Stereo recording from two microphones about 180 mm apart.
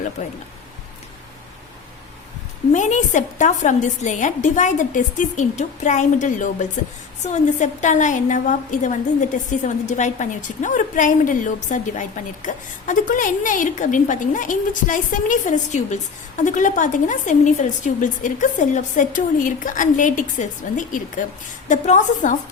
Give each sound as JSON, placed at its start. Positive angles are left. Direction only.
{"t": 2.7, "sound": "a woman's voice", "side_deg": 45}